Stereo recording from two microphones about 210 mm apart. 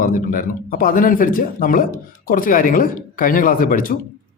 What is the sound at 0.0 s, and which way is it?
Speech, 40° left (ahead or behind).